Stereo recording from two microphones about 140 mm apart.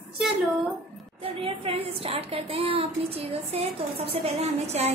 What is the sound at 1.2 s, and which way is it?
A woman's voice, 45° right (ahead or behind).